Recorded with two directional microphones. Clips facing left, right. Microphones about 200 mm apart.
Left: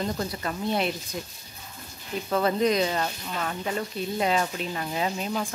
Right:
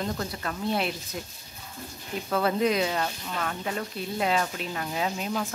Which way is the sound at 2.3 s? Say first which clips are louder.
Left 1 dB; 5° right (ahead or behind).